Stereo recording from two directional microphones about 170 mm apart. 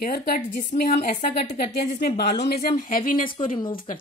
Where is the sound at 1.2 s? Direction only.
50° left (ahead or behind).